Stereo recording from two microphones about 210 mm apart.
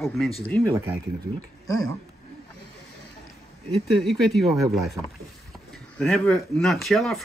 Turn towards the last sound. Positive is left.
turn(degrees=0)  # may be behind; listen again after turning